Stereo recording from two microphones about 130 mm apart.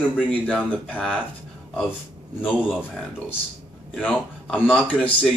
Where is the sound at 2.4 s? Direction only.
10° left (ahead or behind).